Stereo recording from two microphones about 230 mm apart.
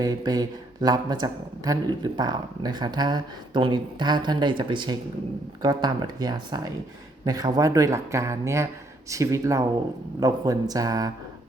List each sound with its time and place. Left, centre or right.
0.0 s speech: centre